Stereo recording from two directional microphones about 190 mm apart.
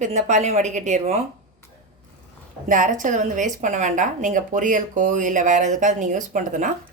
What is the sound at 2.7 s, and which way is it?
A woman's voice, 45° right (ahead or behind).